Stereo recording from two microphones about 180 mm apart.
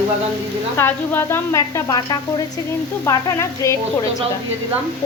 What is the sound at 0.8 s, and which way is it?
Speech, 10° left (ahead or behind).